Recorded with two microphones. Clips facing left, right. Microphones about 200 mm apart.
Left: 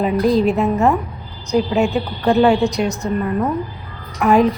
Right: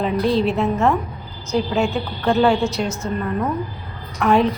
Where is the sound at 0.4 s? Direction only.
Centre (ahead or behind).